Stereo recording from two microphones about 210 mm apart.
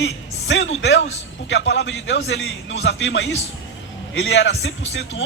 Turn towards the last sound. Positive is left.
turn(degrees=65)  # may be behind; listen again after turning